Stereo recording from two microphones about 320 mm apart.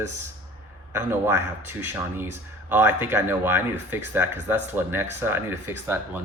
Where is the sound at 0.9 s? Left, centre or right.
Centre.